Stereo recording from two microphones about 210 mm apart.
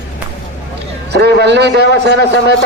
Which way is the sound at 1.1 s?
50° right (ahead or behind).